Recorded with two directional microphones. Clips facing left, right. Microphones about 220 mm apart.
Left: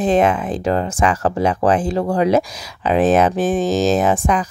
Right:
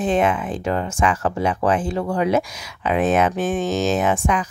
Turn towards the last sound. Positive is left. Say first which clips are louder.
# left 3 dB
turn(degrees=35)  # may be behind; listen again after turning